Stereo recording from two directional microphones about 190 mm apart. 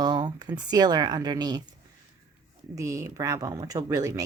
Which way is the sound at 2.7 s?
15° right (ahead or behind).